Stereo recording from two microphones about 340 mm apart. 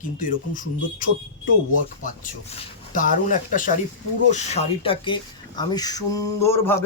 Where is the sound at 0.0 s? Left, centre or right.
Left.